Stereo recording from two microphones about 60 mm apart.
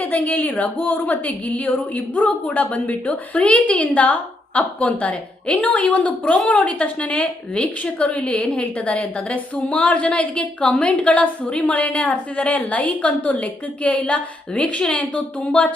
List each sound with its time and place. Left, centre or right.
0.0 s a woman's voice: left